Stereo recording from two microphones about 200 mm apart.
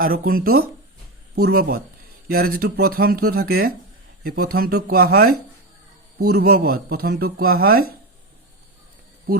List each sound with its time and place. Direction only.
0.0 s speech: 45° right (ahead or behind)